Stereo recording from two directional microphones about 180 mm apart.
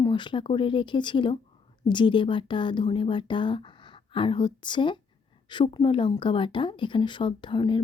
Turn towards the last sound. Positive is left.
turn(degrees=25)  # may be behind; listen again after turning